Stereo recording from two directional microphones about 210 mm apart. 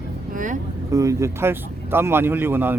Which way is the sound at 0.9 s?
15° right (ahead or behind).